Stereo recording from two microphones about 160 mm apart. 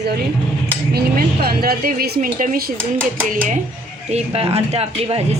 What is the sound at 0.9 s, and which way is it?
A woman's voice, 75° right (ahead or behind).